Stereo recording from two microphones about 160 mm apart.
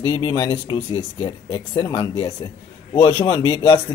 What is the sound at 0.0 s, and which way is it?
Speech, 30° left (ahead or behind).